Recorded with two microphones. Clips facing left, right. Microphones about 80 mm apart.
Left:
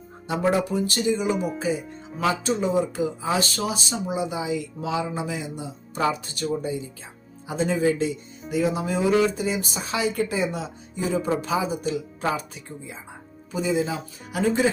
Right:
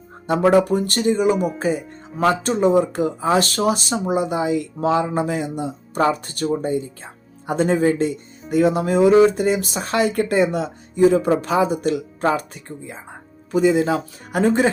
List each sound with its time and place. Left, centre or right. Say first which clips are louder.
0.5 s speech: right 7 dB; right
12.4 s speech: right 4 dB; right
13.5 s speech: right 8 dB; right